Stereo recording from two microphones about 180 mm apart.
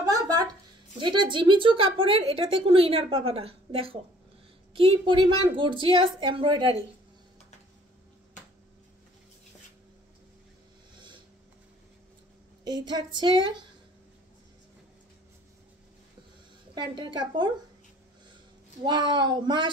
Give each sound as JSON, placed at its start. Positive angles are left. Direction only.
{"t": 0.0, "sound": "a sound", "side_deg": -20}
{"t": 0.9, "sound": "a woman's voice", "side_deg": -25}
{"t": 12.6, "sound": "a woman's voice", "side_deg": -25}
{"t": 16.7, "sound": "a woman's voice", "side_deg": -25}
{"t": 18.9, "sound": "a woman's voice", "side_deg": -25}